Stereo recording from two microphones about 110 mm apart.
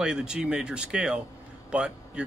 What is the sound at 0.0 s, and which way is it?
Speech, 5° right (ahead or behind).